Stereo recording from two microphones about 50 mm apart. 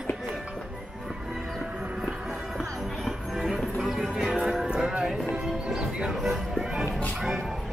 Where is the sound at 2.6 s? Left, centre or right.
Centre.